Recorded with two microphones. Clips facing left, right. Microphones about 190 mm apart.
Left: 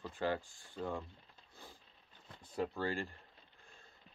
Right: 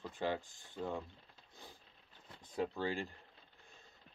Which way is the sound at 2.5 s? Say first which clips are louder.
Even; 15° right (ahead or behind).